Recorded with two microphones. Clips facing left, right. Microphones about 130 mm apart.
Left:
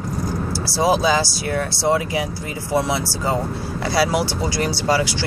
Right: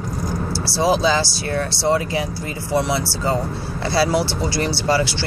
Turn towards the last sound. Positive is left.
turn(degrees=15)  # may be behind; listen again after turning